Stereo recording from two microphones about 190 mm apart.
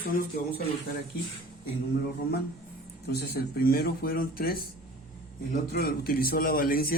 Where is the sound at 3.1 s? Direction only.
60° left (ahead or behind).